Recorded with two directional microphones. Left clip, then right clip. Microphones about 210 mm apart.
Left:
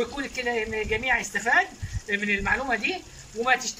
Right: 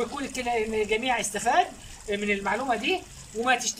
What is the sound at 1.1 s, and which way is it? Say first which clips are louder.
Speech: left 4 dB; 10° right (ahead or behind).